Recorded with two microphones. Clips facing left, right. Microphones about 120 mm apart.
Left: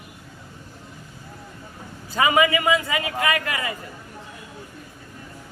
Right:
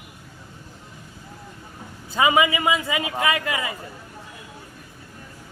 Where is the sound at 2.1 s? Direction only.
20° right (ahead or behind).